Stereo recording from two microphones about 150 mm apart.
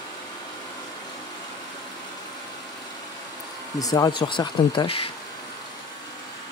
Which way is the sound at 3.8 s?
25° left (ahead or behind).